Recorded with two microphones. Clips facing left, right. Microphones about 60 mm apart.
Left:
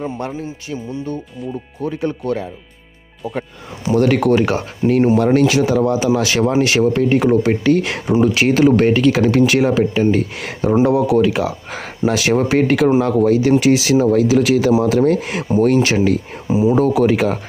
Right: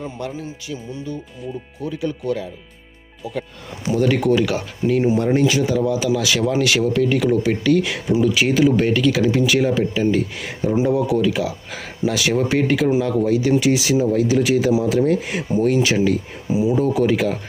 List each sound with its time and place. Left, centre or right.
0.0 s speech: left
4.4 s speech: left
5.1 s speech: left
6.1 s speech: left
15.5 s speech: left
16.5 s a sound: left
16.7 s speech: left